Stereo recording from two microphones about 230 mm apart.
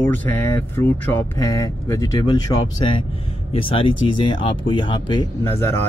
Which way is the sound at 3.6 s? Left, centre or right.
Left.